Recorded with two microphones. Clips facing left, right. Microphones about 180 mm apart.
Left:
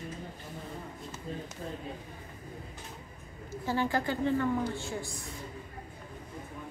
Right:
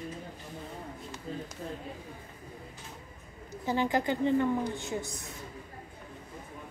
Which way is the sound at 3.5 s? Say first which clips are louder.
Right 1 dB; 20° right (ahead or behind).